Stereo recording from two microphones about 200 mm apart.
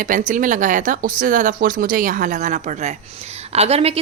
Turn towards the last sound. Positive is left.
turn(degrees=-30)  # may be behind; listen again after turning